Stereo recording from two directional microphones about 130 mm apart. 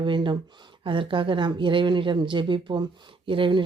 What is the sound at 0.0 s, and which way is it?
Speech, 40° right (ahead or behind).